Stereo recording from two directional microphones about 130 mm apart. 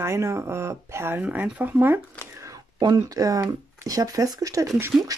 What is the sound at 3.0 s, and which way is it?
A woman's voice, 25° right (ahead or behind).